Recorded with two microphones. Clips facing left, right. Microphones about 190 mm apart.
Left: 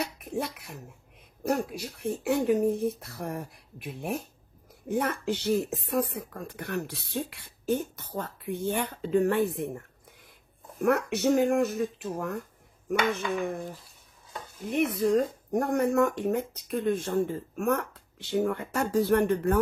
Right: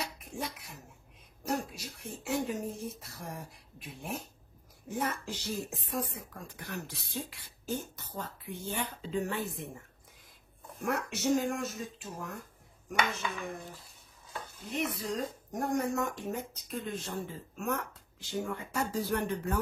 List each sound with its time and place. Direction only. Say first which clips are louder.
0.0 s a sound: left 7 dB; 60° left (ahead or behind)
1.4 s speech: left 6 dB; 60° left (ahead or behind)
10.8 s speech: left 8 dB; 60° left (ahead or behind)
14.6 s speech: left 10 dB; 55° left (ahead or behind)